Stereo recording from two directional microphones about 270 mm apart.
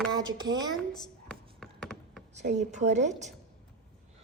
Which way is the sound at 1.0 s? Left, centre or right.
Centre.